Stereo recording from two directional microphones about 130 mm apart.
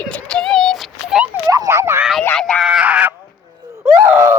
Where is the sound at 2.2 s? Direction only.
5° left (ahead or behind).